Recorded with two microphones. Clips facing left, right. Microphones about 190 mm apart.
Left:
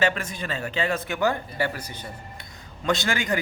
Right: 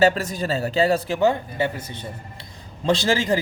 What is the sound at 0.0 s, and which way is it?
A man's voice, 35° right (ahead or behind).